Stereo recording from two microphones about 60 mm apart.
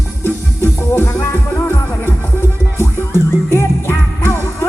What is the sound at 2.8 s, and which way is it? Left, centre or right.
Music, left.